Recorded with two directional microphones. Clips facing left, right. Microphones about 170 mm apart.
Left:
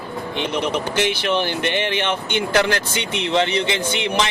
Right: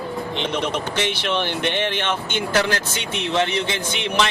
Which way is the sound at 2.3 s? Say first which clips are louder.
Left 3 dB; 55° left (ahead or behind).